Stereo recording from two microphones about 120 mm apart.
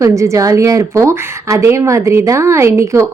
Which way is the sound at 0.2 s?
25° right (ahead or behind).